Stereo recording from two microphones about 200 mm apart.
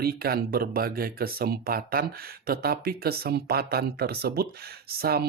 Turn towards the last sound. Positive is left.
turn(degrees=-50)  # may be behind; listen again after turning